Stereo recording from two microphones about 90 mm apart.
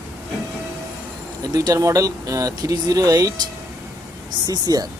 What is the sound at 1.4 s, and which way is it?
Speech, 45° right (ahead or behind).